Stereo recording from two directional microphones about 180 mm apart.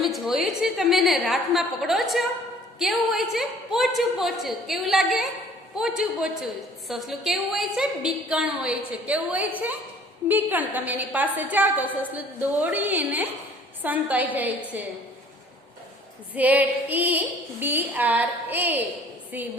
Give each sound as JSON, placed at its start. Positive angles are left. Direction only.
{"t": 0.0, "sound": "a woman's voice", "side_deg": 0}
{"t": 16.3, "sound": "a woman's voice", "side_deg": -10}